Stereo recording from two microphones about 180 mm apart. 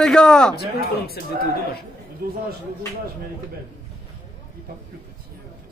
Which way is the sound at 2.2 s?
55° right (ahead or behind).